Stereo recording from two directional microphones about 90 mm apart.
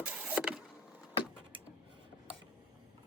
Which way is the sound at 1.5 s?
75° right (ahead or behind).